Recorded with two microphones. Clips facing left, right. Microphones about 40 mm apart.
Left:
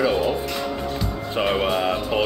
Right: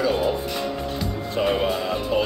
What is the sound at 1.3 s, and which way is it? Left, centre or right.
Speech, left.